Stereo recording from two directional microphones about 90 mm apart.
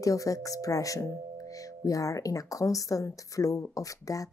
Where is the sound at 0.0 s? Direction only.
40° left (ahead or behind).